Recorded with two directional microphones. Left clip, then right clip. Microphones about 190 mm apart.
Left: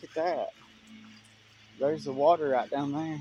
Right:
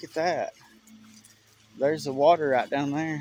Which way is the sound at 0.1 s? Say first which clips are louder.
Right 3 dB; 35° right (ahead or behind).